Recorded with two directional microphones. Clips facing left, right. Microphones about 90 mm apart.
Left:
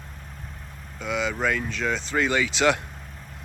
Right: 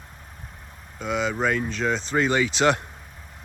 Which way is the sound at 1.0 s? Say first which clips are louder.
Right 2 dB; 35° right (ahead or behind).